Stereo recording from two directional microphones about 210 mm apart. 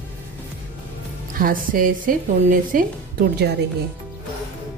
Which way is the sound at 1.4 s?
40° right (ahead or behind).